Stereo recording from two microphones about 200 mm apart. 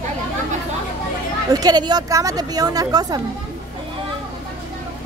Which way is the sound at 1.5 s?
20° right (ahead or behind).